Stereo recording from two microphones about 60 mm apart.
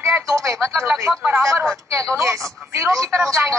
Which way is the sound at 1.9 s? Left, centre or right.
Right.